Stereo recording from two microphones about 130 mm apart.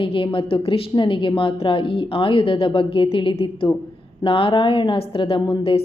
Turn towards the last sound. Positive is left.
turn(degrees=45)  # may be behind; listen again after turning